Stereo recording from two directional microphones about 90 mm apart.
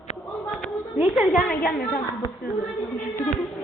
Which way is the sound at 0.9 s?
10° right (ahead or behind).